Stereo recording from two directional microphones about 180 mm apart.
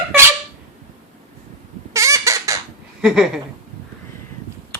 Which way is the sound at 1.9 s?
15° right (ahead or behind).